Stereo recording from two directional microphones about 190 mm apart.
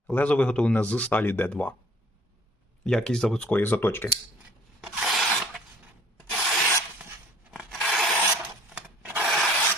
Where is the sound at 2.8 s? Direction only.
5° left (ahead or behind).